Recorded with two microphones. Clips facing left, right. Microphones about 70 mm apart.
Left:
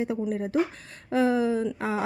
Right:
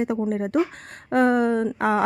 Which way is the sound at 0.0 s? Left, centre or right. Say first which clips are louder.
Right 4 dB; right.